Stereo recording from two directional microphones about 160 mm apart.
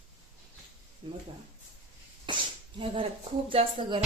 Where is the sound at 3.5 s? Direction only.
35° right (ahead or behind).